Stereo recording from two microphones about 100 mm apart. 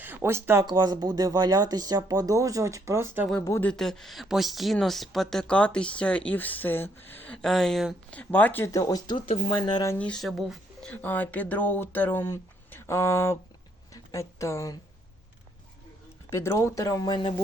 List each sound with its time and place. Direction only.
0.0 s speech: 20° right (ahead or behind)
0.6 s speech: 45° right (ahead or behind); by 3.2 s 30° right (ahead or behind)
3.6 s speech: 5° left (ahead or behind)
7.4 s speech: 5° left (ahead or behind)
8.1 s speech: 15° left (ahead or behind)
8.6 s speech: 35° left (ahead or behind)
10.0 s speech: 5° left (ahead or behind)
10.8 s speech: 15° left (ahead or behind)
16.3 s speech: 25° left (ahead or behind)